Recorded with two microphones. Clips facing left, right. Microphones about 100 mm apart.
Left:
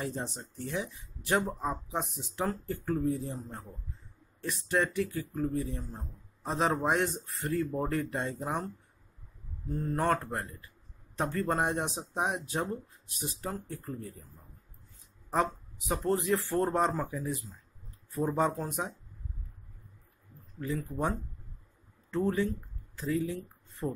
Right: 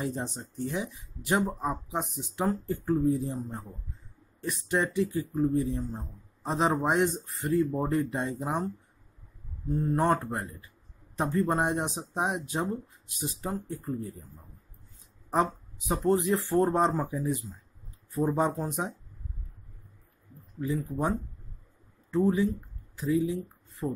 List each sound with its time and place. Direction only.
0.0 s speech: 20° right (ahead or behind)
15.9 s speech: 20° right (ahead or behind)
22.1 s speech: 15° right (ahead or behind)